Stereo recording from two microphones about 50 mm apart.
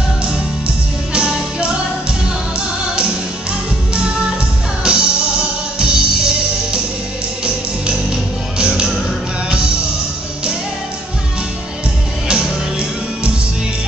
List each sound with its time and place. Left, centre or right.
1.1 s music: centre
4.8 s music: centre
8.5 s music: centre
12.3 s music: centre